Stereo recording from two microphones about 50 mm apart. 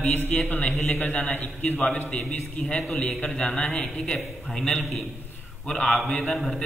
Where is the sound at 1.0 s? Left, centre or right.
Left.